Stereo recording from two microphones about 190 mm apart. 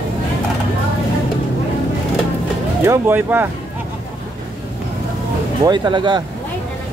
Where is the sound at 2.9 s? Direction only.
10° right (ahead or behind).